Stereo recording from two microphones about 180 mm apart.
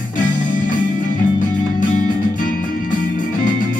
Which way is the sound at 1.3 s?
45° left (ahead or behind).